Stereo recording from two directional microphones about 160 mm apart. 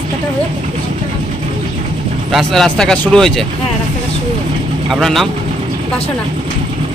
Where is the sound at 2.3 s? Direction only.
Centre (ahead or behind).